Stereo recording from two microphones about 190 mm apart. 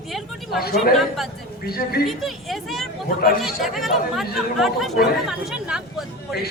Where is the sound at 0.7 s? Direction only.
Centre (ahead or behind).